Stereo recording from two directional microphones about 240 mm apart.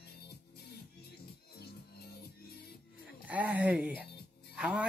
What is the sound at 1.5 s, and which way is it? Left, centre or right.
Music, left.